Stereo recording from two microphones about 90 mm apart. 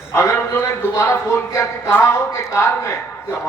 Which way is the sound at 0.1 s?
30° left (ahead or behind).